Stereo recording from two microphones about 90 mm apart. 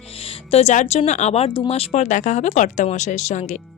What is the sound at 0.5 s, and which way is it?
Speech, 90° left.